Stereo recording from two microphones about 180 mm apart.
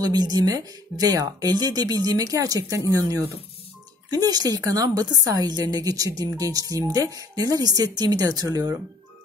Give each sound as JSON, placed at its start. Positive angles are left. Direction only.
{"t": 0.0, "sound": "speech", "side_deg": -20}
{"t": 4.1, "sound": "speech", "side_deg": -20}